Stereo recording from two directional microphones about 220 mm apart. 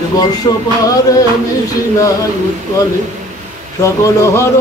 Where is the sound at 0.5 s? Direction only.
15° left (ahead or behind).